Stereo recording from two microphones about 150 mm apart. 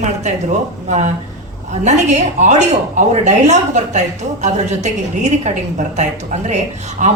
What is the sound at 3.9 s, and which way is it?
A woman's voice, 50° right (ahead or behind).